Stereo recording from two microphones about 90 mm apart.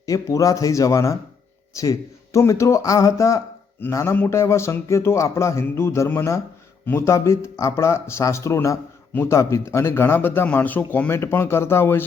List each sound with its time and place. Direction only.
0.0 s speech: 40° left (ahead or behind)